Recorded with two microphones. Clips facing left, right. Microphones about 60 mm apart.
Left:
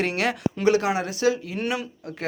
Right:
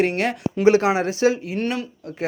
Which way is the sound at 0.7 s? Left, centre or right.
Right.